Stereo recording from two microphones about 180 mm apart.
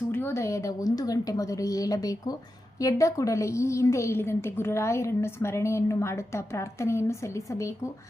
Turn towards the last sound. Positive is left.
turn(degrees=15)  # may be behind; listen again after turning